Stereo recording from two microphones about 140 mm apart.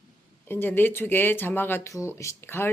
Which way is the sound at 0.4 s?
15° left (ahead or behind).